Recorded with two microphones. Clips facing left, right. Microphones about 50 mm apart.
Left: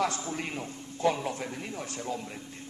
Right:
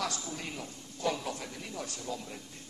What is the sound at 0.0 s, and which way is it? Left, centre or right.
A man's voice, left.